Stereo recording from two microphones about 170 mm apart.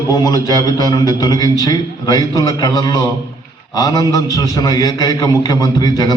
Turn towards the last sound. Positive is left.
turn(degrees=25)  # may be behind; listen again after turning